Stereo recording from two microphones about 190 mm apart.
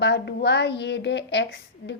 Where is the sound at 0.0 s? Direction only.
65° left (ahead or behind).